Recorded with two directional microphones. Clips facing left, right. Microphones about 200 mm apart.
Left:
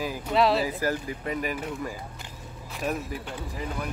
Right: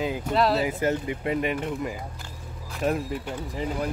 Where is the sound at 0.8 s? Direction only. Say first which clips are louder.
Right 3 dB; 25° right (ahead or behind).